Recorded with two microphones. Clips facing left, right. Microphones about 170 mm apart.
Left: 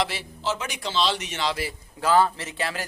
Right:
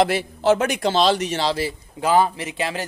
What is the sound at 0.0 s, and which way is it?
Speech, 55° right (ahead or behind).